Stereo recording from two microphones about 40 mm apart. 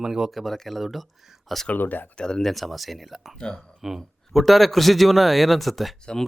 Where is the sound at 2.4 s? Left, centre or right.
Centre.